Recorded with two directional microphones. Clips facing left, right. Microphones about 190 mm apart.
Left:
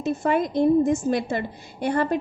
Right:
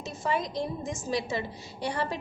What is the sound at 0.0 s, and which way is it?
A woman's voice, 60° left (ahead or behind).